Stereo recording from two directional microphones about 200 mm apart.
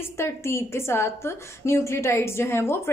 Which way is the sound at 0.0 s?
10° left (ahead or behind).